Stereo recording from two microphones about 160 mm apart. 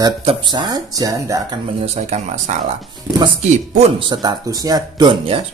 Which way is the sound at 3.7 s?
30° right (ahead or behind).